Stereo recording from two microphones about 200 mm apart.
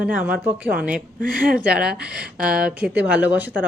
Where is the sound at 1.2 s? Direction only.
45° right (ahead or behind).